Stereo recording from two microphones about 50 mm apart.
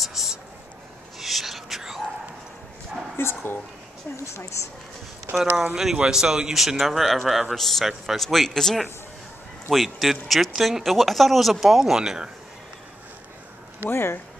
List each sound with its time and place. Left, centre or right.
0.0 s a sound: centre
1.2 s whispering: centre
3.2 s speech: left
4.2 s a woman's voice: left
5.6 s a man's voice: centre
13.8 s speech: left